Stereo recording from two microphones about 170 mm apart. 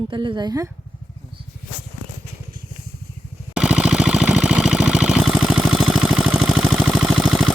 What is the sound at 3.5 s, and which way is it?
Jackhammer, 5° right (ahead or behind).